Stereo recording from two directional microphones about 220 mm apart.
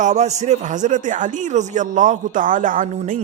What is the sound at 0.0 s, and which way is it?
Speech, 30° right (ahead or behind).